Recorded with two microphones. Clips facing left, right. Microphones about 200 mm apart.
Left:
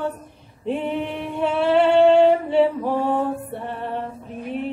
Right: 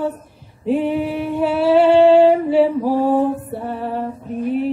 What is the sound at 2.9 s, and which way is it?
Music, 35° right (ahead or behind).